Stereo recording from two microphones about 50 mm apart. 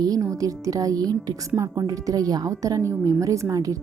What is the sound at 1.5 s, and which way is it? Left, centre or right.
Speech, right.